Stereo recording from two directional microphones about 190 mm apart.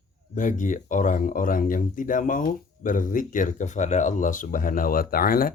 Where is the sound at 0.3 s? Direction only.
40° left (ahead or behind).